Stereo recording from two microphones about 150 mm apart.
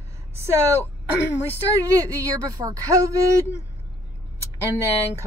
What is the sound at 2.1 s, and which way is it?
Speech, 20° right (ahead or behind).